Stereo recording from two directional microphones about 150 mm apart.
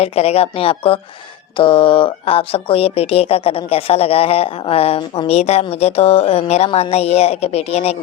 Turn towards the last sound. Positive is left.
turn(degrees=45)  # may be behind; listen again after turning